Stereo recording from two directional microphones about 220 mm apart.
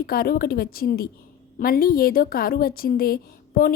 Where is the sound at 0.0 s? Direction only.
45° left (ahead or behind).